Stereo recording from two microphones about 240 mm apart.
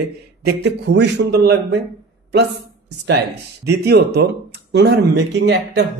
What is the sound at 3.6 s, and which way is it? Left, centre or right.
A man's voice, right.